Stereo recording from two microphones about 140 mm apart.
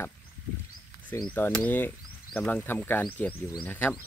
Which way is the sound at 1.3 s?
15° left (ahead or behind).